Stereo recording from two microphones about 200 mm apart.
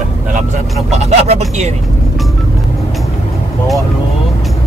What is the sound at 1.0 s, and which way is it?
Speech, 30° right (ahead or behind).